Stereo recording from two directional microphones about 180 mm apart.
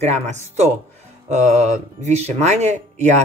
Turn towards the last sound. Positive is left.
turn(degrees=-40)  # may be behind; listen again after turning